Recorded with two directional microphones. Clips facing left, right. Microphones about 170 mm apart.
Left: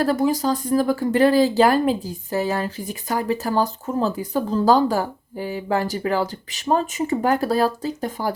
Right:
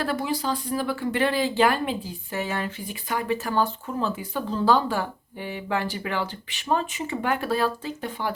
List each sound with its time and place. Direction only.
0.0 s speech: 45° left (ahead or behind)